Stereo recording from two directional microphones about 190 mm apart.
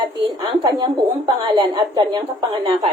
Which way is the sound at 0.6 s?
20° right (ahead or behind).